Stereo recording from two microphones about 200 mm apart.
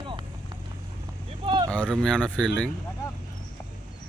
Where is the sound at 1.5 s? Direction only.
25° right (ahead or behind).